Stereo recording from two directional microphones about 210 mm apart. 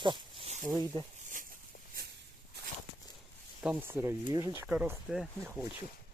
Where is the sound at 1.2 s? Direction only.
40° right (ahead or behind).